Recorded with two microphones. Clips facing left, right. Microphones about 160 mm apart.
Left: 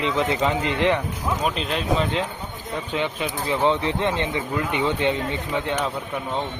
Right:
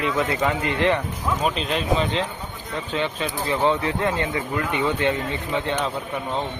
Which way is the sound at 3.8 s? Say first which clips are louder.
Even; 25° left (ahead or behind).